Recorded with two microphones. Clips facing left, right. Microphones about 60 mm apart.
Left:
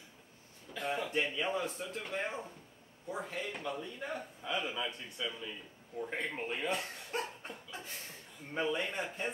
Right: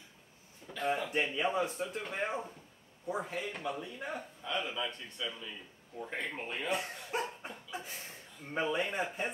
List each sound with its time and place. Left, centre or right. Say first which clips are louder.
0.8 s a sound: right 3 dB; centre
1.1 s a man's voice: right 2 dB; centre
4.4 s a man's voice: even; centre
6.7 s chuckle: right 2 dB; centre
8.5 s a man's voice: right 2 dB; centre